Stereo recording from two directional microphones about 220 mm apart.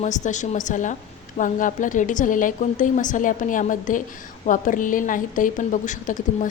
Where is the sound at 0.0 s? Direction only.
35° left (ahead or behind).